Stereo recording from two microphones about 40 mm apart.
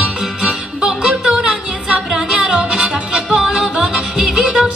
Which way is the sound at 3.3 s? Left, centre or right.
Centre.